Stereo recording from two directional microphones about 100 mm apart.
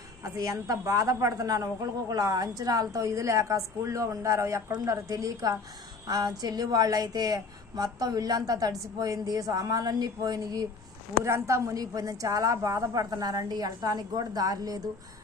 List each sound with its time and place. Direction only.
0.2 s a woman's voice: 35° right (ahead or behind)
11.2 s a woman's voice: 30° right (ahead or behind)